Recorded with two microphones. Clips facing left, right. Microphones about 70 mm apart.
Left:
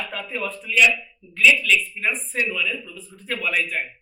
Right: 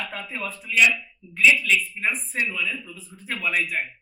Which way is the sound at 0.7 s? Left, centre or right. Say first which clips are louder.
Left 1 dB; centre.